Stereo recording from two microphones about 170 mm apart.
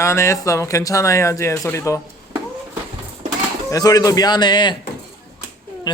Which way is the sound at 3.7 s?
20° left (ahead or behind).